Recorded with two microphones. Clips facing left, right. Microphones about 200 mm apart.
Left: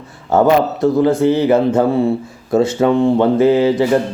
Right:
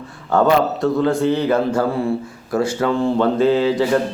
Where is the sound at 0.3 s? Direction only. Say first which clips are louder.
Left 3 dB; 20° left (ahead or behind).